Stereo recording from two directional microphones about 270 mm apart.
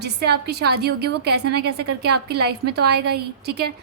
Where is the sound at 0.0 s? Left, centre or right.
Right.